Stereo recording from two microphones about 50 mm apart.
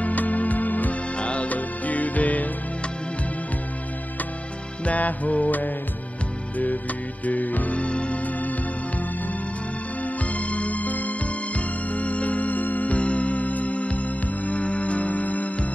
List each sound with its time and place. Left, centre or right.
0.0 s music: left
4.8 s music: left
7.2 s music: left
10.0 s music: left